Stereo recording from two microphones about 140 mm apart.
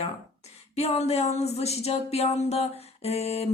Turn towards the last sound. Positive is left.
turn(degrees=45)  # may be behind; listen again after turning